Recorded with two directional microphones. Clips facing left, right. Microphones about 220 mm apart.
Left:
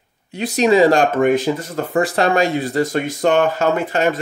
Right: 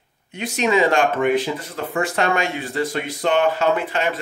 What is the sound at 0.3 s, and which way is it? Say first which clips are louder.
Speech: left 5 dB; 35° left (ahead or behind).